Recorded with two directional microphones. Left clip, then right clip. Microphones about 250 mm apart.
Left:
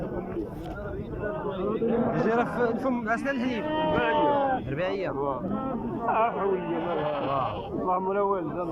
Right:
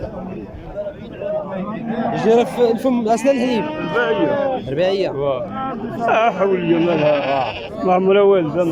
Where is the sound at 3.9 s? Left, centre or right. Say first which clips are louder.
Right 8 dB; right.